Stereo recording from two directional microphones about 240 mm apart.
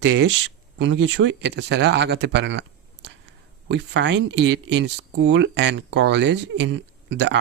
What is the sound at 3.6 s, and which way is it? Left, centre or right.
Speech, right.